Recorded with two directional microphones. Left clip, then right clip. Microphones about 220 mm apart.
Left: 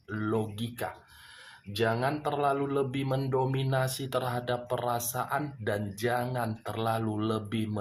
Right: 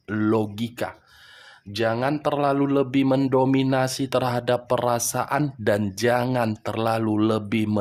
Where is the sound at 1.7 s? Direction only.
45° right (ahead or behind).